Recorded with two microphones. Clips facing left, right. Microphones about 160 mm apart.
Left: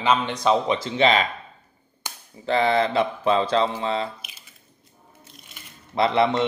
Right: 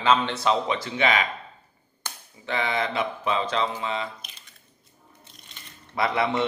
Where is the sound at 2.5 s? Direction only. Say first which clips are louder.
Left 7 dB; 35° left (ahead or behind).